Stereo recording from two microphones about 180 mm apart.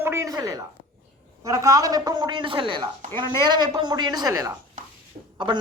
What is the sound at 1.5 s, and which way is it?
A woman's voice, 15° right (ahead or behind).